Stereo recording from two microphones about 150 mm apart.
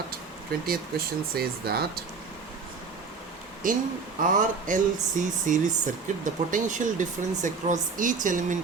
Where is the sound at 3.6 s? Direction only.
65° right (ahead or behind).